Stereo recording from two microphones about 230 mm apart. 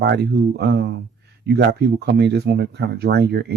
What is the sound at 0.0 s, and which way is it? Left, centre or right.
Speech, right.